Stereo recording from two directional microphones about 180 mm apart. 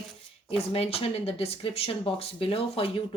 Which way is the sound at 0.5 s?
35° left (ahead or behind).